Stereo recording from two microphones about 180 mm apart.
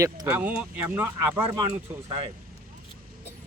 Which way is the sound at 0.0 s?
10° right (ahead or behind).